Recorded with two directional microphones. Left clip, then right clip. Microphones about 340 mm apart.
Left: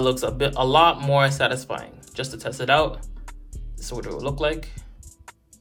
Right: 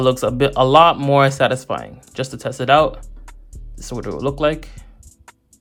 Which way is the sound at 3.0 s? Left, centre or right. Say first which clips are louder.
Even; centre.